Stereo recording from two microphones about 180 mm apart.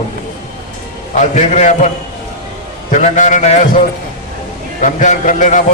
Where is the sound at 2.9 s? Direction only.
40° left (ahead or behind).